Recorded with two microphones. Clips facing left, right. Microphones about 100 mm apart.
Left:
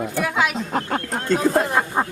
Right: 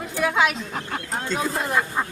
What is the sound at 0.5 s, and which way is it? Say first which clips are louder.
Speech: left 7 dB; 50° left (ahead or behind).